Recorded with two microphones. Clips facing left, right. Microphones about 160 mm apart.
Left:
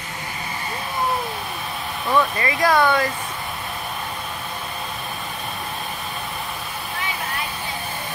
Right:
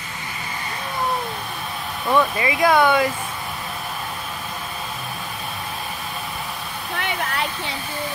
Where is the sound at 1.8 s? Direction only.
Centre (ahead or behind).